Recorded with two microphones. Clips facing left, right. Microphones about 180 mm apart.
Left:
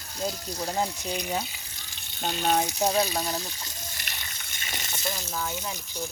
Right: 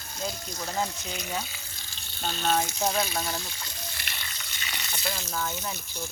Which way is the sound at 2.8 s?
35° left (ahead or behind).